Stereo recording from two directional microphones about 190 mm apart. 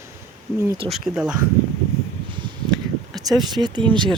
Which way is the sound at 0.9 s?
Centre (ahead or behind).